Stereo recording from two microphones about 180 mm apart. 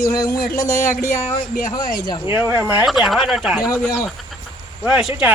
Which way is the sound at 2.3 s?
15° right (ahead or behind).